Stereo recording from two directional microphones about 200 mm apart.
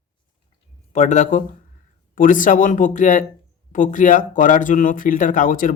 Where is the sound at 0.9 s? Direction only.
35° left (ahead or behind).